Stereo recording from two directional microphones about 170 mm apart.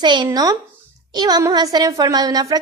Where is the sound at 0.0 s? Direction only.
25° right (ahead or behind).